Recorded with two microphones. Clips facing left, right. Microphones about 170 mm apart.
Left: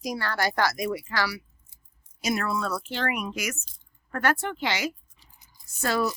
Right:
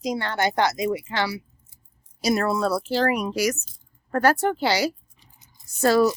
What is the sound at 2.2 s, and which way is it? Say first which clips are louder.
A woman's voice: right 6 dB; 35° right (ahead or behind).